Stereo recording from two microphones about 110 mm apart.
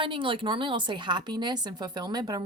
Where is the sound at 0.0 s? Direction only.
50° right (ahead or behind).